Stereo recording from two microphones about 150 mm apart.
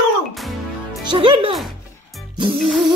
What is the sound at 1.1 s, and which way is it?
Speech, 35° right (ahead or behind).